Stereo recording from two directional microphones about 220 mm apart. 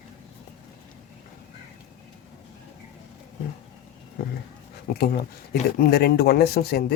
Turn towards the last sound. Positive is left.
turn(degrees=45)  # may be behind; listen again after turning